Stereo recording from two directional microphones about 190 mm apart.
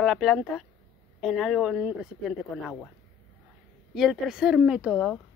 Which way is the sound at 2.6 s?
5° left (ahead or behind).